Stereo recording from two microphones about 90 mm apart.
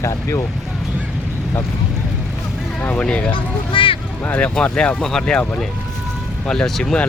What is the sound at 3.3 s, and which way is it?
Speech, 75° left (ahead or behind).